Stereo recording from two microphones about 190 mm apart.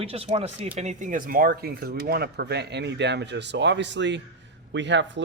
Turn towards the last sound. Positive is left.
turn(degrees=-70)  # may be behind; listen again after turning